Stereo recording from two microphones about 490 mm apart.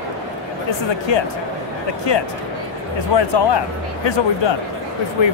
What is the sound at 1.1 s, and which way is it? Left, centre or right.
Speech, left.